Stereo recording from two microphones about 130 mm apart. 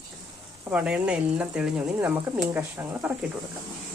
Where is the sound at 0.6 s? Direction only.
10° right (ahead or behind).